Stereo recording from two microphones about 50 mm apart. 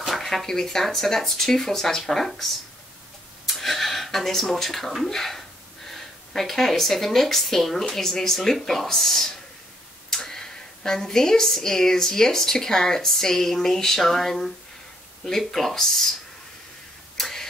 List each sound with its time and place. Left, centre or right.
0.0 s speech: centre
17.2 s tick-tock: centre